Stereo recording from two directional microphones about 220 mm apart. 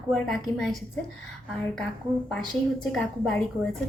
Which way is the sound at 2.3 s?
5° left (ahead or behind).